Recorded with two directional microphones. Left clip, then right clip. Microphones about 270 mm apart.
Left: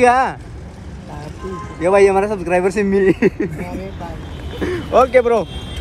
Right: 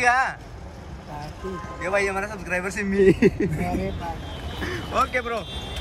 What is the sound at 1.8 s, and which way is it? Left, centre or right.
A man's voice, centre.